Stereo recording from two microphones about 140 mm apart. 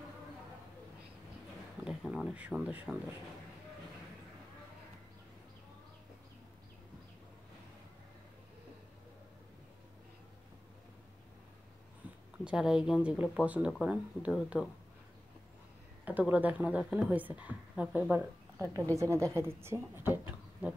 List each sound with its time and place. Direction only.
1.9 s a woman's voice: 5° right (ahead or behind)
12.4 s speech: 5° right (ahead or behind)
16.1 s a woman's voice: 10° right (ahead or behind)